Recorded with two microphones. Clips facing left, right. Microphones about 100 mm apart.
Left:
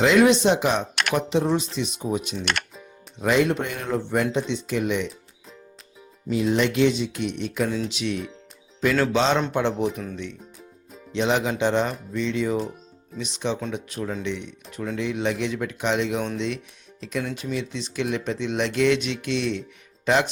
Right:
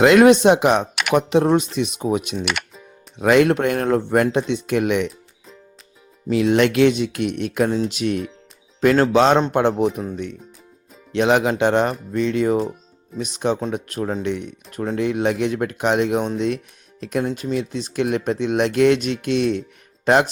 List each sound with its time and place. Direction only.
0.0 s speech: 60° right (ahead or behind)
2.4 s music: 5° right (ahead or behind)
3.2 s speech: 65° right (ahead or behind)
6.3 s speech: 75° right (ahead or behind); by 7.7 s 60° right (ahead or behind)
7.7 s speech: 45° right (ahead or behind)
11.1 s speech: 60° right (ahead or behind)